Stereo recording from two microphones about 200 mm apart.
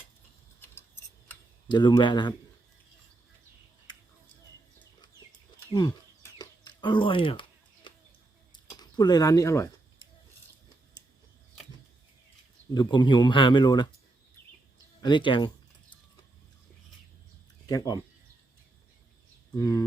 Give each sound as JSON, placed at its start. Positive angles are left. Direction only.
{"t": 1.6, "sound": "speech", "side_deg": 20}
{"t": 6.4, "sound": "a sound", "side_deg": 25}
{"t": 12.7, "sound": "speech", "side_deg": 20}
{"t": 15.0, "sound": "a sound", "side_deg": 25}
{"t": 17.7, "sound": "speech", "side_deg": 20}
{"t": 19.5, "sound": "speech", "side_deg": 15}